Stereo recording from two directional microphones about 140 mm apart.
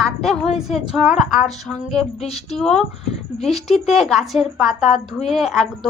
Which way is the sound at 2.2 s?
50° left (ahead or behind).